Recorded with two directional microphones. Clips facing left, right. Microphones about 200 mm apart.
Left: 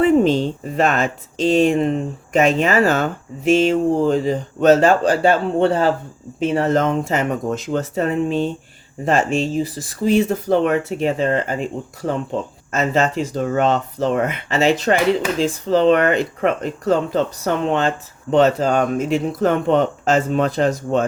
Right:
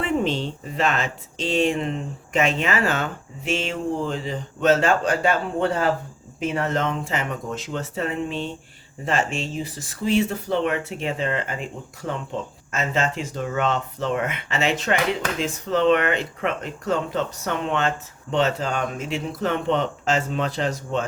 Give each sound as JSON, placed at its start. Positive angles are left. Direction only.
{"t": 0.0, "sound": "speech", "side_deg": 40}
{"t": 12.7, "sound": "speech", "side_deg": 40}